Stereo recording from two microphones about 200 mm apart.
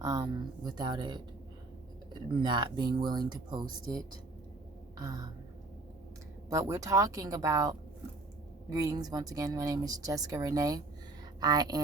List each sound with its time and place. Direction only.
0.0 s speech: 20° right (ahead or behind)
2.4 s speech: 20° right (ahead or behind)
6.5 s speech: 15° right (ahead or behind)